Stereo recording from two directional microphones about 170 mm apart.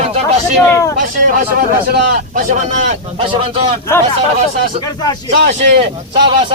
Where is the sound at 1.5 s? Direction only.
60° right (ahead or behind); by 3.7 s 35° right (ahead or behind).